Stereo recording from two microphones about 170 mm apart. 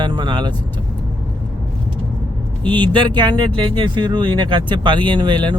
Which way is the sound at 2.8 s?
25° right (ahead or behind).